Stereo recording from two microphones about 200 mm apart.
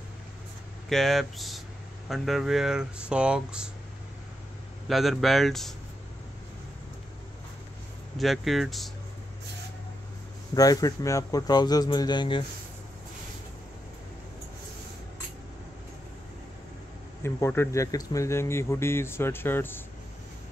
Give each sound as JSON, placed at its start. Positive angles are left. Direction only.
{"t": 0.8, "sound": "speech", "side_deg": 0}
{"t": 4.8, "sound": "speech", "side_deg": 0}
{"t": 8.2, "sound": "speech", "side_deg": 0}
{"t": 10.5, "sound": "speech", "side_deg": 20}
{"t": 17.2, "sound": "speech", "side_deg": 10}